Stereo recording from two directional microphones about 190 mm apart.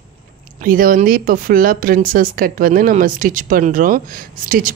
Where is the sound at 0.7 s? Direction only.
50° right (ahead or behind).